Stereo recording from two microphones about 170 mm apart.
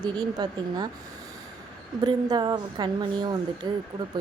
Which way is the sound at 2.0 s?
25° right (ahead or behind).